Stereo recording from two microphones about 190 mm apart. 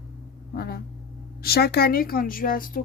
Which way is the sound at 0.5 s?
50° left (ahead or behind).